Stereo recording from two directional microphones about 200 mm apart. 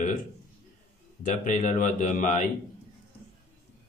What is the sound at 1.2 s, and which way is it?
Speech, 40° left (ahead or behind).